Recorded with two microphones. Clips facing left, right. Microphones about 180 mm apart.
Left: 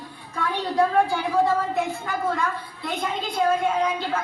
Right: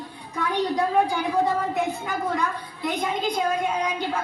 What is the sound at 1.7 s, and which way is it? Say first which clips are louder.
A woman's voice: even; 15° right (ahead or behind).